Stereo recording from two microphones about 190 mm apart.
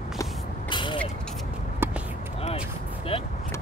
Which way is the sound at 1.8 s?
10° right (ahead or behind).